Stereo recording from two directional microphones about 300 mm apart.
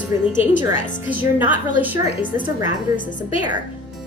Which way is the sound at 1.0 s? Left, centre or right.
Centre.